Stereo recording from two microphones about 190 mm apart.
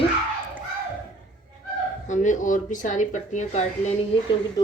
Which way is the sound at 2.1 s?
40° left (ahead or behind).